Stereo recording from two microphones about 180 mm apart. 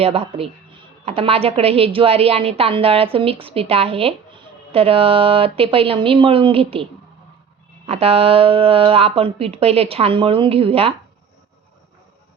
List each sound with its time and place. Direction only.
0.0 s a woman's voice: 35° right (ahead or behind)
7.9 s a woman's voice: 35° right (ahead or behind)